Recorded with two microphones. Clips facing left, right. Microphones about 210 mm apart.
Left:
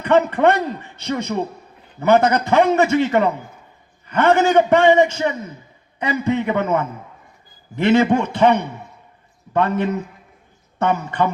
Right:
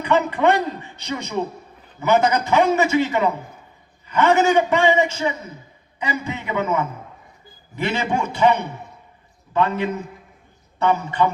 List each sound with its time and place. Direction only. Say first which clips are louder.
0.0 s a man's voice: left 3 dB; 60° left (ahead or behind)
10.8 s a man's voice: even; 55° left (ahead or behind)